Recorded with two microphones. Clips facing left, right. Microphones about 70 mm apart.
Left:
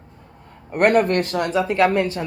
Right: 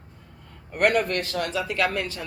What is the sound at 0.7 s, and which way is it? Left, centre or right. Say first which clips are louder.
Speech: left 6 dB; left.